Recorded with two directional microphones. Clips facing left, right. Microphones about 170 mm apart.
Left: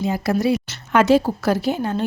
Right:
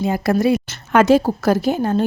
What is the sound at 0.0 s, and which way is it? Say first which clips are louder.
Speech: right 3 dB; 55° right (ahead or behind).